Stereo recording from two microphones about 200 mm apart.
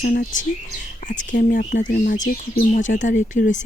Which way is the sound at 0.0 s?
45° left (ahead or behind).